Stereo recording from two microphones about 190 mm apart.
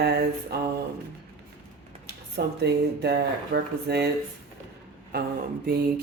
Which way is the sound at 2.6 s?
60° right (ahead or behind).